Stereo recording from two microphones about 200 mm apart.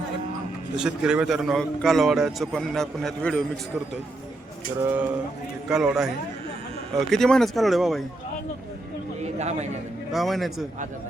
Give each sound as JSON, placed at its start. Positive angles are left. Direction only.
{"t": 0.8, "sound": "a man's voice", "side_deg": -5}
{"t": 4.8, "sound": "a sound", "side_deg": -10}
{"t": 5.6, "sound": "a man's voice", "side_deg": -5}
{"t": 7.1, "sound": "a man's voice", "side_deg": 0}
{"t": 9.2, "sound": "a sound", "side_deg": -35}
{"t": 10.1, "sound": "a man's voice", "side_deg": 0}